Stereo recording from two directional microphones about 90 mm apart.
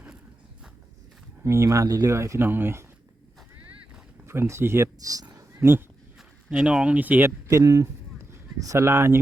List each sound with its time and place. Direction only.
1.5 s speech: 35° right (ahead or behind)
4.3 s speech: 30° right (ahead or behind)
5.0 s speech: 40° right (ahead or behind)
5.4 s a sound: 25° right (ahead or behind)
6.7 s speech: 15° right (ahead or behind)
7.5 s speech: 40° right (ahead or behind)